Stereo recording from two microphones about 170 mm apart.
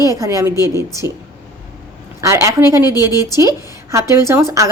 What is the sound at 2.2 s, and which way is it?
A woman's voice, 15° right (ahead or behind).